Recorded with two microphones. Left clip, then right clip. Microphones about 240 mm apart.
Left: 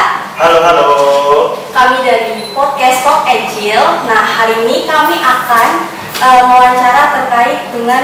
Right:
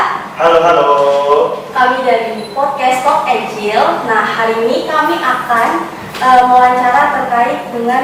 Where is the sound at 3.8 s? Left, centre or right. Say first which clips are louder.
Left 3 dB; centre.